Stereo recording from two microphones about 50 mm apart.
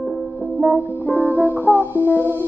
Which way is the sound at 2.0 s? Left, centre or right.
Left.